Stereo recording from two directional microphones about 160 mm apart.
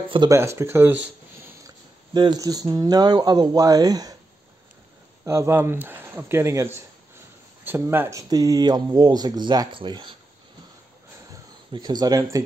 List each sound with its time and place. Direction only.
0.3 s speech: 15° right (ahead or behind)
2.1 s speech: 25° right (ahead or behind)
5.2 s speech: 15° right (ahead or behind)
11.7 s speech: 25° right (ahead or behind)